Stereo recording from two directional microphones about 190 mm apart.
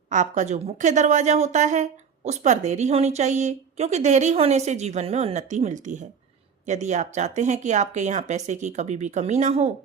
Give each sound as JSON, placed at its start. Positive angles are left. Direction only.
{"t": 0.1, "sound": "a woman's voice", "side_deg": -40}